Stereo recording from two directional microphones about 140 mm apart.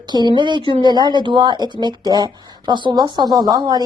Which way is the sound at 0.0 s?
30° right (ahead or behind).